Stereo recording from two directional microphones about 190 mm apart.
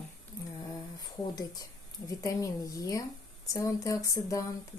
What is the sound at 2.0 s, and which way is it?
Speech, 20° left (ahead or behind).